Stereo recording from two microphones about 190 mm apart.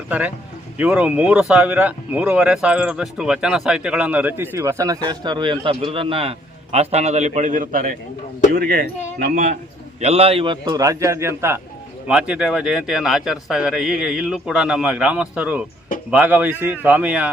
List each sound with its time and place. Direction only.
0.1 s speech: 10° right (ahead or behind); by 9.5 s 50° right (ahead or behind)
10.0 s a man's voice: 30° right (ahead or behind); by 17.3 s 5° right (ahead or behind)